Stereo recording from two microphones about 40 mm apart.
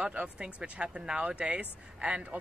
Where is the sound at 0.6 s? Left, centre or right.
Right.